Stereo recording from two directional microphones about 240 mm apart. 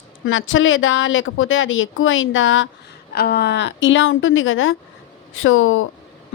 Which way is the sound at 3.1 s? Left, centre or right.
Left.